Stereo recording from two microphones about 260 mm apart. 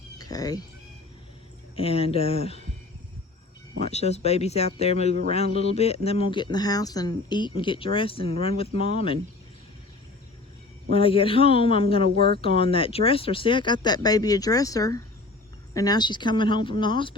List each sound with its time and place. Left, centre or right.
0.2 s a sound: centre
1.7 s speech: left
3.8 s speech: left
10.9 s speech: left